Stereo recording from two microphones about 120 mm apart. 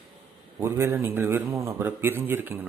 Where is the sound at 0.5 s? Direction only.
25° right (ahead or behind).